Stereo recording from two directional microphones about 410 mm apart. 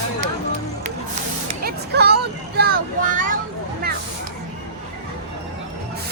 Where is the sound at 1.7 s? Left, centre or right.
Right.